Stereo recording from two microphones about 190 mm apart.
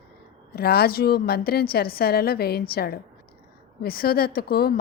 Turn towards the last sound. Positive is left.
turn(degrees=55)  # may be behind; listen again after turning